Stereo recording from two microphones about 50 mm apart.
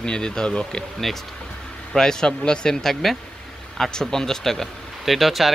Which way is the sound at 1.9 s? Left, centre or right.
Centre.